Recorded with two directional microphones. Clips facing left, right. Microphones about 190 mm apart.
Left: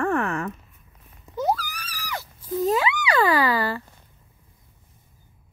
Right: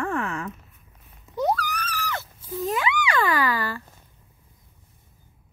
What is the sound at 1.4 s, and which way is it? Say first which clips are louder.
Screaming: right 1 dB; 5° left (ahead or behind).